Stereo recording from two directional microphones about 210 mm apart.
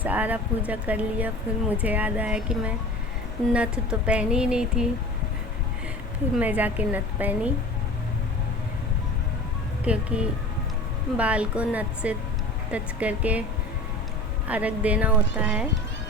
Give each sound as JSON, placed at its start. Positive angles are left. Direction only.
{"t": 0.0, "sound": "speech", "side_deg": -10}
{"t": 6.3, "sound": "speech", "side_deg": -10}
{"t": 9.8, "sound": "speech", "side_deg": -5}
{"t": 14.4, "sound": "speech", "side_deg": -5}